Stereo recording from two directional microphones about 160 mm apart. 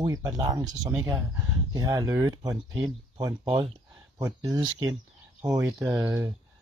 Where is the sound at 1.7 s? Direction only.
20° right (ahead or behind).